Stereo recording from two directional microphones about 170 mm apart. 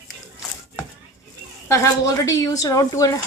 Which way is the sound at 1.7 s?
20° left (ahead or behind).